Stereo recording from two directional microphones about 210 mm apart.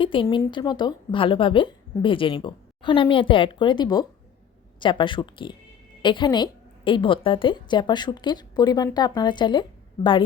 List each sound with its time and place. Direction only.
0.0 s a woman's voice: 25° left (ahead or behind)